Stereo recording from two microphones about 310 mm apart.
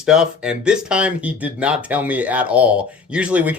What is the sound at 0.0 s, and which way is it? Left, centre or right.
Speech, centre.